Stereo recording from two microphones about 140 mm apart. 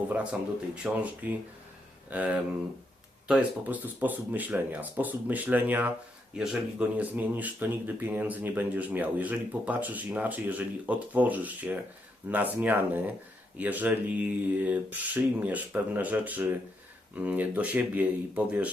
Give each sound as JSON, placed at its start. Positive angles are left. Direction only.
{"t": 0.8, "sound": "speech", "side_deg": -10}